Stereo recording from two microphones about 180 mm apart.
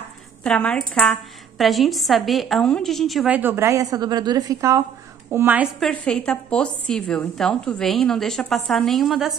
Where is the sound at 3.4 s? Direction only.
15° right (ahead or behind).